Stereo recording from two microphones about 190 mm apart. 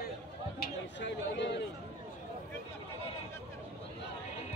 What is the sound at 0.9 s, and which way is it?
Chatter, 65° left (ahead or behind).